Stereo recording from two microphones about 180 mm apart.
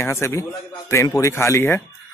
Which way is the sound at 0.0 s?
15° left (ahead or behind).